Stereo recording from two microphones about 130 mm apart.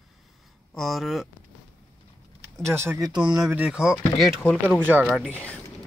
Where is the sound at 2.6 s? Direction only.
20° right (ahead or behind).